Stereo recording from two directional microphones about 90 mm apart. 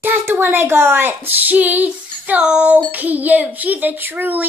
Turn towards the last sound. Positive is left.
turn(degrees=-20)  # may be behind; listen again after turning